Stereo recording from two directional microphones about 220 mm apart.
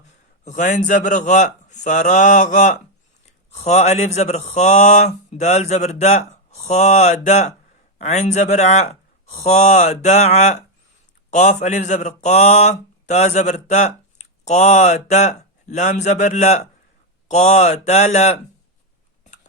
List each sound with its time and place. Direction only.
0.4 s speech: 35° left (ahead or behind)